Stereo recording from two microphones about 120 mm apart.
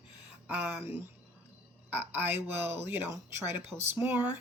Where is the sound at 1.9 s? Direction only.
15° right (ahead or behind).